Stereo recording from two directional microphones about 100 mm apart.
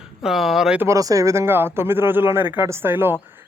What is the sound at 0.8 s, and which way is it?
Speech, 30° right (ahead or behind).